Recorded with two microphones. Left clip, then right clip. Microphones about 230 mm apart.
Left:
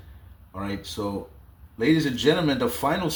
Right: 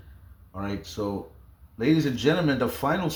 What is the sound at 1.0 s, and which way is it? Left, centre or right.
Speech, right.